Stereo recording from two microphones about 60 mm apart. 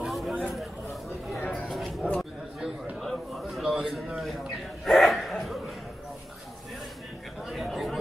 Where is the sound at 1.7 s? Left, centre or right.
Centre.